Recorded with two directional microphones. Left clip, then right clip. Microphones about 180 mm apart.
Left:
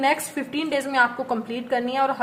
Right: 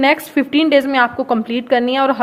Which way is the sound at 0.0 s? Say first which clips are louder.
Right 8 dB; 50° right (ahead or behind).